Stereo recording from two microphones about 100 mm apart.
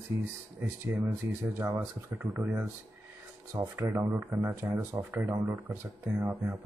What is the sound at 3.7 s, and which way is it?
Speech, 30° right (ahead or behind).